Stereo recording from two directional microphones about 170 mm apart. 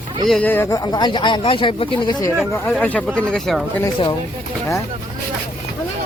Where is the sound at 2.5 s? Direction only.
15° left (ahead or behind).